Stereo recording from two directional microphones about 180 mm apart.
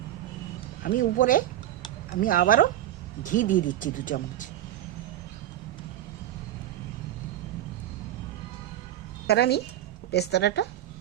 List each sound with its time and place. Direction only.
0.8 s speech: 50° left (ahead or behind)
9.2 s a woman's voice: 65° left (ahead or behind)